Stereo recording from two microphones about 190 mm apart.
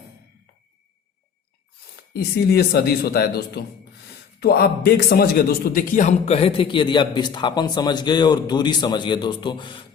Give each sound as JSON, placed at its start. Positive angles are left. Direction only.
{"t": 2.1, "sound": "a man's voice", "side_deg": 55}